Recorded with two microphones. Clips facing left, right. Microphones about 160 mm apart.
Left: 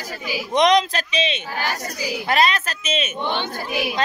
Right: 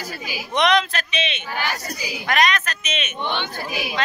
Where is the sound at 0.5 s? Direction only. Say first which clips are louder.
Left 3 dB; 35° left (ahead or behind).